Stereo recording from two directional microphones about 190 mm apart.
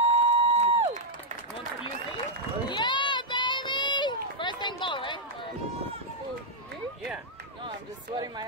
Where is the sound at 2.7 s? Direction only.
25° left (ahead or behind).